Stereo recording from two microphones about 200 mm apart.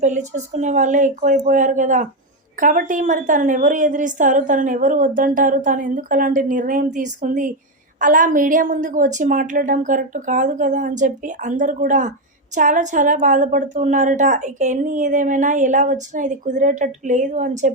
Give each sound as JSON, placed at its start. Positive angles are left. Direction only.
{"t": 0.0, "sound": "a woman's voice", "side_deg": -35}